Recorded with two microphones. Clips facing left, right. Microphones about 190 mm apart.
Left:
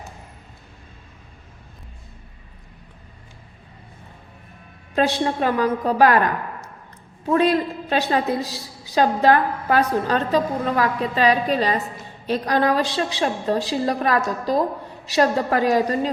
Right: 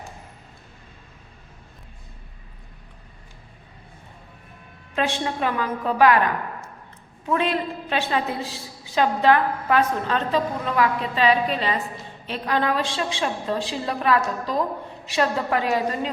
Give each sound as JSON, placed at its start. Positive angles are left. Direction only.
{"t": 4.9, "sound": "a woman's voice", "side_deg": 40}
{"t": 7.3, "sound": "a woman's voice", "side_deg": 40}